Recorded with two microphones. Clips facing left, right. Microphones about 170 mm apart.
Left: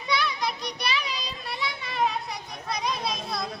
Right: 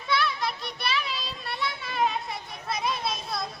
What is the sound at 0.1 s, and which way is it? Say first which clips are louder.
Children playing: even; centre (ahead or behind).